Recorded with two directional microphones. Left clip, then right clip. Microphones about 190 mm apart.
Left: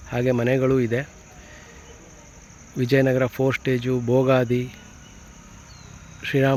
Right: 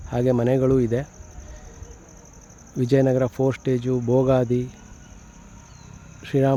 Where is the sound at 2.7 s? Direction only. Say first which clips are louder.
Even; 15° right (ahead or behind).